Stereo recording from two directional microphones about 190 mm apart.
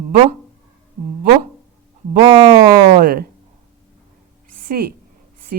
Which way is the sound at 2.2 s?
20° right (ahead or behind).